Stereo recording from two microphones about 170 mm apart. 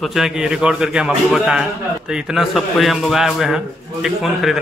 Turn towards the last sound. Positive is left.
turn(degrees=-5)  # may be behind; listen again after turning